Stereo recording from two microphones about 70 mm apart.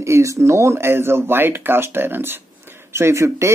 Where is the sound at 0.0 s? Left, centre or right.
Right.